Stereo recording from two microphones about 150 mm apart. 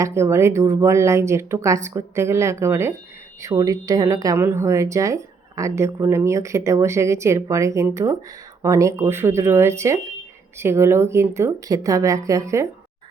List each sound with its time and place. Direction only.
0.0 s speech: 20° right (ahead or behind)